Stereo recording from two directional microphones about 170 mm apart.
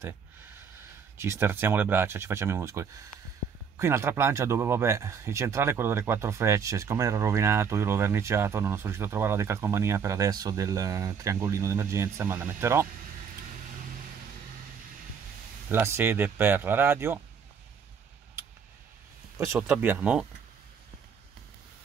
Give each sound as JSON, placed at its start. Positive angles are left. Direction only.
{"t": 1.1, "sound": "speech", "side_deg": -15}
{"t": 15.7, "sound": "speech", "side_deg": -15}
{"t": 19.3, "sound": "speech", "side_deg": -10}